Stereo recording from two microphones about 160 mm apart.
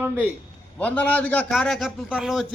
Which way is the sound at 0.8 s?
10° left (ahead or behind).